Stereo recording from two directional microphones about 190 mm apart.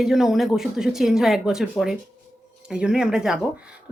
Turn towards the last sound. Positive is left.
turn(degrees=-5)  # may be behind; listen again after turning